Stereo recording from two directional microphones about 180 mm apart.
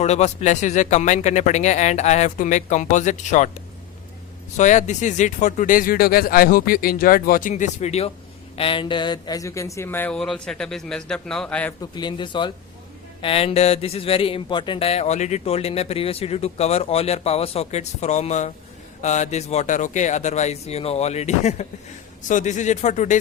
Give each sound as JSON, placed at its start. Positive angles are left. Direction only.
{"t": 0.0, "sound": "speech", "side_deg": 40}
{"t": 4.5, "sound": "a man's voice", "side_deg": 40}
{"t": 11.8, "sound": "speech", "side_deg": 25}